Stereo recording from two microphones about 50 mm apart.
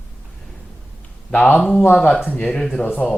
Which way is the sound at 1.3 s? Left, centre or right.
Left.